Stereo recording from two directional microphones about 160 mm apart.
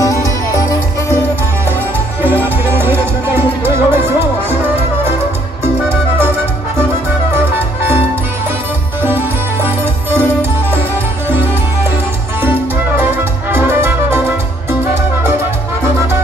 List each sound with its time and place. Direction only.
0.0 s music: 20° left (ahead or behind)
2.2 s music: 15° right (ahead or behind)
7.5 s music: 15° right (ahead or behind)
12.4 s music: 15° right (ahead or behind)